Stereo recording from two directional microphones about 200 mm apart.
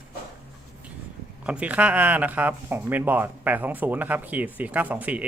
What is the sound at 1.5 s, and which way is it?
Speech, 5° right (ahead or behind).